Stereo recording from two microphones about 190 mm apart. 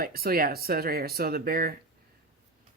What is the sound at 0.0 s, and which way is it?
Speech, 50° right (ahead or behind).